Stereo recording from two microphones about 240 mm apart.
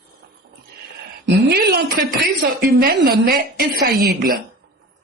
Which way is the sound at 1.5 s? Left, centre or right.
Right.